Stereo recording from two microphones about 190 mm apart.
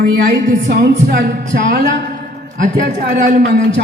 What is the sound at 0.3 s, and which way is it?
Speech, 50° right (ahead or behind).